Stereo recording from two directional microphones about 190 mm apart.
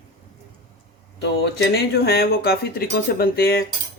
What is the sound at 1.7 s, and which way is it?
Speech, 55° left (ahead or behind).